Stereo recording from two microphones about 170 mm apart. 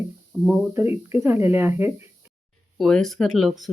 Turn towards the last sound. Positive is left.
turn(degrees=0)  # may be behind; listen again after turning